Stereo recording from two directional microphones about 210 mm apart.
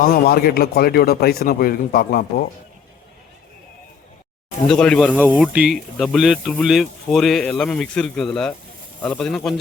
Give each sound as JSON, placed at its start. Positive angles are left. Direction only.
{"t": 0.0, "sound": "speech", "side_deg": 45}
{"t": 4.7, "sound": "speech", "side_deg": 5}